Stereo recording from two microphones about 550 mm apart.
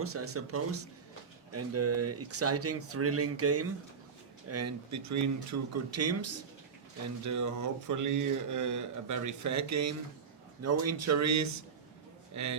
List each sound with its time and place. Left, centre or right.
0.0 s a man's voice: right